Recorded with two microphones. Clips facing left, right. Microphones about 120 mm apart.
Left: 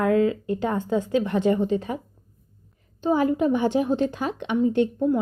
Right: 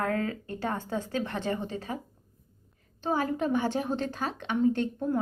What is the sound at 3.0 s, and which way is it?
A woman's voice, 15° left (ahead or behind).